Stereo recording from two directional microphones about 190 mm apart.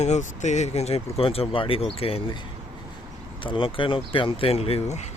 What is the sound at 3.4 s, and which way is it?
Speech, 25° left (ahead or behind).